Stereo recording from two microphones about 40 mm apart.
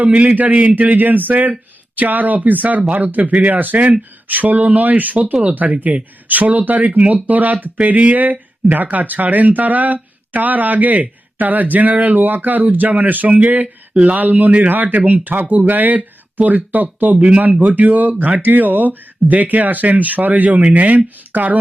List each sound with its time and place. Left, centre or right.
0.0 s speech: right
13.9 s speech: right
14.2 s speech: right
17.2 s speech: right
17.7 s speech: right